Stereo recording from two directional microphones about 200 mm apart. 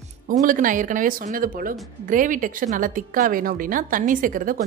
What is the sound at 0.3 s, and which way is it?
Speech, 40° right (ahead or behind).